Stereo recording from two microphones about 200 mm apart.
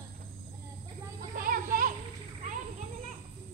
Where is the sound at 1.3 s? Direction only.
45° right (ahead or behind).